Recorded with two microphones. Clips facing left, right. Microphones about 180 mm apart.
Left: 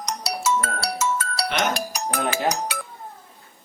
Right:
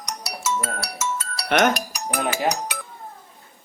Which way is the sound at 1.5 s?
55° right (ahead or behind).